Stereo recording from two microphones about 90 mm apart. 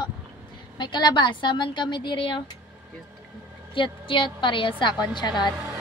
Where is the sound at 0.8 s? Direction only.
60° left (ahead or behind).